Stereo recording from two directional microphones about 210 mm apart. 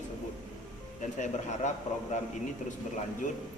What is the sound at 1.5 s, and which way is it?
Speech, 35° left (ahead or behind).